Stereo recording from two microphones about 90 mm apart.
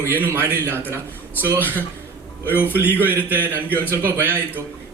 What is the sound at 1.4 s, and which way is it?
Speech, 20° right (ahead or behind).